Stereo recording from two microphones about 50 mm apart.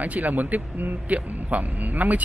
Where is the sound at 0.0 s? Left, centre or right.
Right.